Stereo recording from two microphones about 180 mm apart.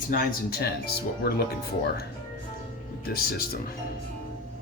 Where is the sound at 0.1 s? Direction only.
55° left (ahead or behind).